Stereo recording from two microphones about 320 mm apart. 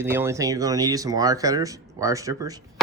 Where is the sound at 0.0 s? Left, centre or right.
Centre.